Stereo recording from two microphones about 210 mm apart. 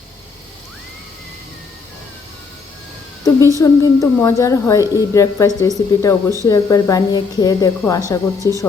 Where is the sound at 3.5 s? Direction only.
15° left (ahead or behind).